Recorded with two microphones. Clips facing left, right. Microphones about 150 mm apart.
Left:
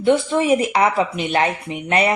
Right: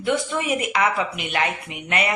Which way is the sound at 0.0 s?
30° left (ahead or behind).